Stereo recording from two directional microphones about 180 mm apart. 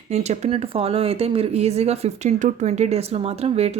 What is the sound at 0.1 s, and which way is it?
Speech, 40° right (ahead or behind).